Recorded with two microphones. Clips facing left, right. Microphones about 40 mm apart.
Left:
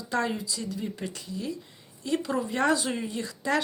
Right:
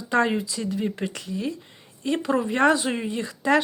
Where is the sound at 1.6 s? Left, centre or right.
Right.